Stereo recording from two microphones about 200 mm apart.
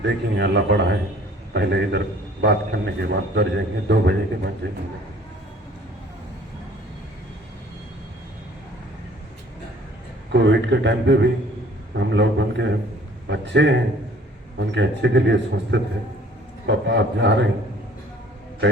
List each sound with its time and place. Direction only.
0.0 s a man's voice: 60° right (ahead or behind)
10.3 s a man's voice: 60° right (ahead or behind)